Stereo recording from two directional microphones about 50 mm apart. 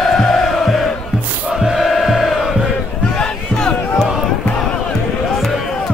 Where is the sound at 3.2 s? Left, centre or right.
Centre.